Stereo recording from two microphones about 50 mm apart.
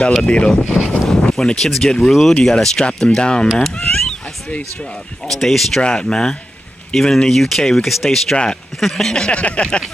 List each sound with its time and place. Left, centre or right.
0.2 s a sound: left
0.7 s boat: centre
1.3 s speech: centre
3.9 s cat: centre
5.3 s speech: centre
5.8 s speech: centre
9.2 s a sound: left